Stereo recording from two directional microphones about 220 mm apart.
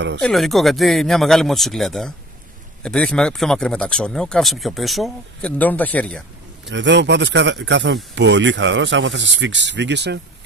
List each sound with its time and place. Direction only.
0.2 s speech: centre (ahead or behind)
6.7 s speech: 55° right (ahead or behind)